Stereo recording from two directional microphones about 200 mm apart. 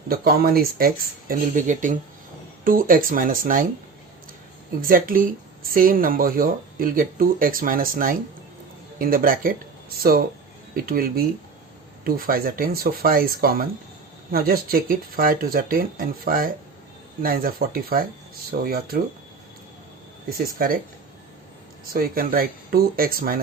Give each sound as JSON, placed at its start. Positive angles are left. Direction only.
{"t": 0.1, "sound": "speech", "side_deg": -50}
{"t": 4.8, "sound": "speech", "side_deg": -45}
{"t": 21.9, "sound": "speech", "side_deg": -45}